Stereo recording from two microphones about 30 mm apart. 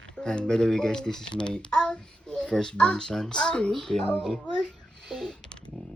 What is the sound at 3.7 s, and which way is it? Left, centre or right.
Speech, centre.